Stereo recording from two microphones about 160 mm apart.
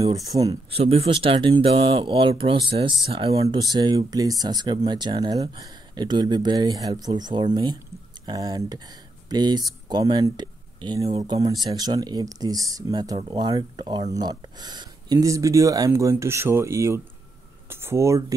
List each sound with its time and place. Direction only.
0.0 s speech: 25° right (ahead or behind)
0.7 s speech: 40° right (ahead or behind); by 18.2 s 20° right (ahead or behind)